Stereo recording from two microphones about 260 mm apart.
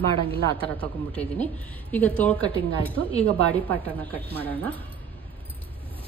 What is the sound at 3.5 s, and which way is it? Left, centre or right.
A woman's voice, centre.